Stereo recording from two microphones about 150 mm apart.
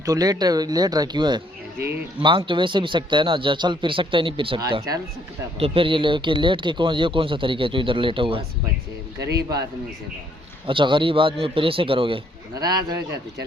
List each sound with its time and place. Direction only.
0.0 s speech: 25° right (ahead or behind)
10.7 s speech: 35° right (ahead or behind)